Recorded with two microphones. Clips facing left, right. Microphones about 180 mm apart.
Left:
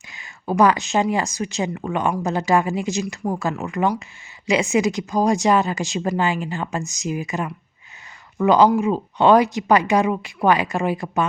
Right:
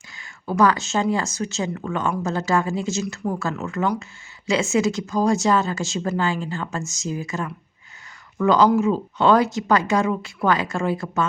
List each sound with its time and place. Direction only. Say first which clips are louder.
0.1 s speech: left 3 dB; 20° left (ahead or behind)